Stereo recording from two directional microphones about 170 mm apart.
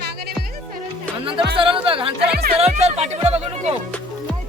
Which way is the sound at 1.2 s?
30° right (ahead or behind).